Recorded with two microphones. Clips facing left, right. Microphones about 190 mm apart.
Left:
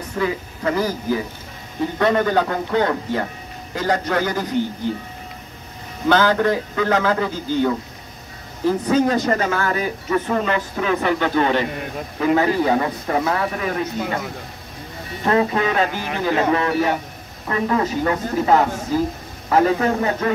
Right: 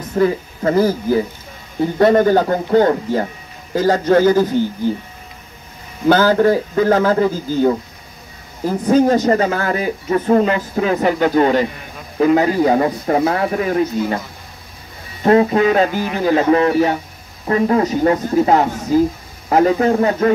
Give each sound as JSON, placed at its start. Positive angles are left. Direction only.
{"t": 0.1, "sound": "speech", "side_deg": -40}
{"t": 6.0, "sound": "speech", "side_deg": -40}
{"t": 15.2, "sound": "speech", "side_deg": -35}